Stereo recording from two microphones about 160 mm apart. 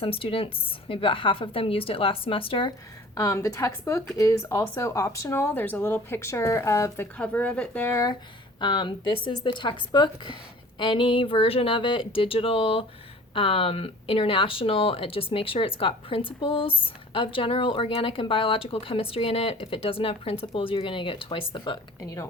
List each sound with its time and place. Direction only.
0.0 s speech: 35° left (ahead or behind)
3.2 s speech: 20° left (ahead or behind)
8.6 s speech: 30° left (ahead or behind)
22.0 s speech: 20° left (ahead or behind)